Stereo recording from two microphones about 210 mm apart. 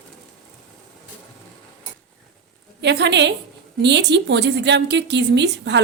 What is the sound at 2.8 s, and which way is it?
A woman's voice, 55° right (ahead or behind).